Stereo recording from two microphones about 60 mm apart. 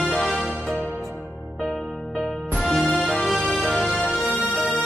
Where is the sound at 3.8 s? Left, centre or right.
Centre.